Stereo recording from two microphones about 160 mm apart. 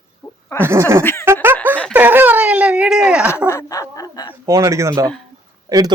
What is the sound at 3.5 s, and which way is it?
Speech, 20° left (ahead or behind).